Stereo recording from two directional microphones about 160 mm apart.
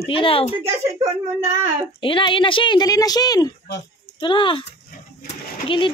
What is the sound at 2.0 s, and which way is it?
Speech, 30° left (ahead or behind).